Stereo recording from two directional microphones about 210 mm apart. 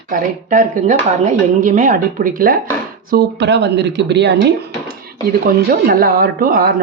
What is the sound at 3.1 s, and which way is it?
Speech, 50° right (ahead or behind).